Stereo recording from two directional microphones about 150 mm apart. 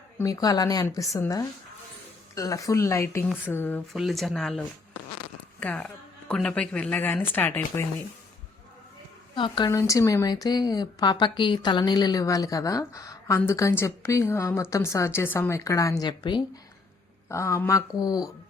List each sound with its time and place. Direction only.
0.2 s a woman's voice: 25° left (ahead or behind)
3.9 s a woman's voice: centre (ahead or behind)
9.3 s a woman's voice: 30° left (ahead or behind)
9.6 s speech: 20° left (ahead or behind)
17.2 s speech: 20° left (ahead or behind)